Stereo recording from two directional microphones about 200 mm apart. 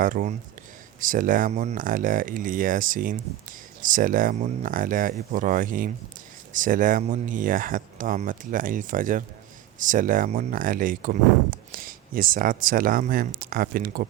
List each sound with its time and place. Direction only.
0.0 s speech: 40° right (ahead or behind)